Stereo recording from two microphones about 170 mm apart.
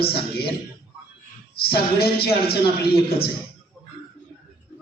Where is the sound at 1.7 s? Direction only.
65° left (ahead or behind).